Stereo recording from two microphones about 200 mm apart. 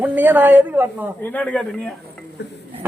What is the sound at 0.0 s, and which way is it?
A man's voice, 10° right (ahead or behind).